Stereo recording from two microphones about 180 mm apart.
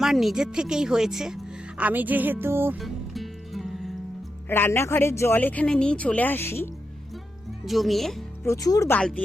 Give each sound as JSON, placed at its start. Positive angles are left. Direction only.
{"t": 0.0, "sound": "speech", "side_deg": 0}
{"t": 2.7, "sound": "music", "side_deg": 0}
{"t": 4.4, "sound": "speech", "side_deg": 10}
{"t": 7.6, "sound": "speech", "side_deg": 0}
{"t": 8.4, "sound": "speech", "side_deg": 20}
{"t": 9.0, "sound": "speech", "side_deg": 5}